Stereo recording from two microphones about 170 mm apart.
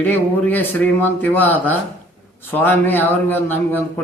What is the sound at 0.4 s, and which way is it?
Speech, 10° left (ahead or behind).